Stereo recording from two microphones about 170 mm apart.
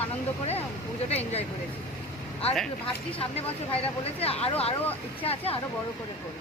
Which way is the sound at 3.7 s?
35° left (ahead or behind).